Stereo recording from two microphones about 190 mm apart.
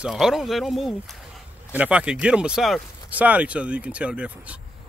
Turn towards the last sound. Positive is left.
turn(degrees=-5)  # may be behind; listen again after turning